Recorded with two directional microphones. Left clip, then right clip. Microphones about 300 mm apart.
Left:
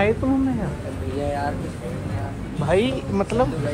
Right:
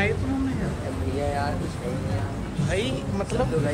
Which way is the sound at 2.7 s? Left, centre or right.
Centre.